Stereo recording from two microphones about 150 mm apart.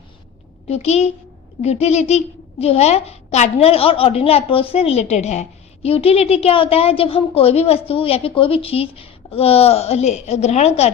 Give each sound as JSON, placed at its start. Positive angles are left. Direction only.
{"t": 0.7, "sound": "a woman's voice", "side_deg": 45}